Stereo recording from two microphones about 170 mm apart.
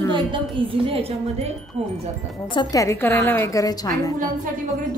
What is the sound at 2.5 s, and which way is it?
A woman's voice, 25° left (ahead or behind).